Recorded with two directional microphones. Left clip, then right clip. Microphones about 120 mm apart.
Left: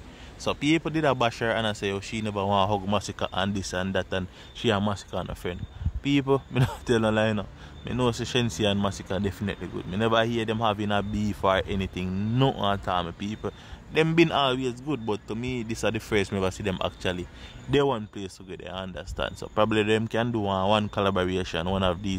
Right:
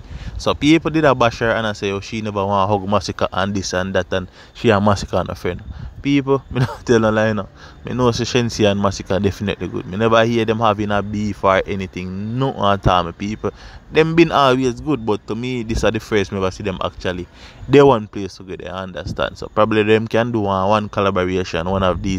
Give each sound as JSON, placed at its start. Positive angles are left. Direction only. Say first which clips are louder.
{"t": 0.4, "sound": "speech", "louder": "right 10 dB", "side_deg": -50}
{"t": 4.8, "sound": "speech", "louder": "right 13 dB", "side_deg": -75}
{"t": 5.3, "sound": "speech", "louder": "right 10 dB", "side_deg": -45}
{"t": 6.0, "sound": "speech", "louder": "right 7 dB", "side_deg": -25}
{"t": 12.2, "sound": "speech", "louder": "right 3 dB", "side_deg": -5}
{"t": 12.5, "sound": "speech", "louder": "right 11 dB", "side_deg": -45}
{"t": 13.2, "sound": "speech", "louder": "right 9 dB", "side_deg": -35}
{"t": 14.3, "sound": "speech", "louder": "right 10 dB", "side_deg": -60}
{"t": 16.1, "sound": "speech", "louder": "right 7 dB", "side_deg": -30}
{"t": 17.6, "sound": "speech", "louder": "right 13 dB", "side_deg": -60}
{"t": 18.1, "sound": "speech", "louder": "right 10 dB", "side_deg": -40}
{"t": 19.4, "sound": "speech", "louder": "right 8 dB", "side_deg": -30}
{"t": 20.9, "sound": "speech", "louder": "right 8 dB", "side_deg": -25}